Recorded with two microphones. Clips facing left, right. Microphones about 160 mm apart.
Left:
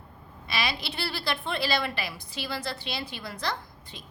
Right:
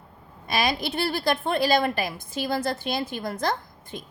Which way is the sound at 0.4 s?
45° right (ahead or behind).